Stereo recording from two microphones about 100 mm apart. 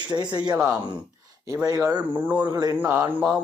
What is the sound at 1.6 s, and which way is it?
Speech, 35° right (ahead or behind).